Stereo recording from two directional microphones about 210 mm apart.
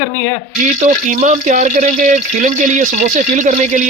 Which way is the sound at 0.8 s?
35° right (ahead or behind).